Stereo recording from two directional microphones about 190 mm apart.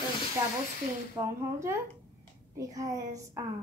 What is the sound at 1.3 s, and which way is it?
A woman's voice, 15° right (ahead or behind).